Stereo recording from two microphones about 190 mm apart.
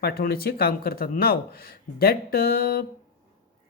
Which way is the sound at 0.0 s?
55° left (ahead or behind).